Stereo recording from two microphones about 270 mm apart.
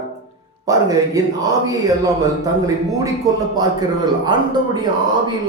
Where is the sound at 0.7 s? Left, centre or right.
Centre.